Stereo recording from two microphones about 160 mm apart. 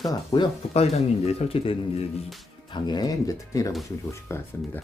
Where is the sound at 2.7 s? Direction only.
30° left (ahead or behind).